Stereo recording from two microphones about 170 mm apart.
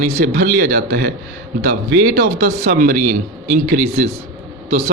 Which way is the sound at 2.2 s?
55° right (ahead or behind).